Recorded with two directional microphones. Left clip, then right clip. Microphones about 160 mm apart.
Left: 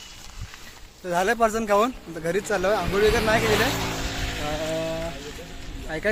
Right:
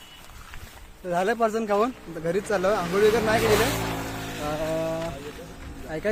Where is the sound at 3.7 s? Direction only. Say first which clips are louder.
Left 1 dB; 75° right (ahead or behind); by 4.4 s 60° right (ahead or behind).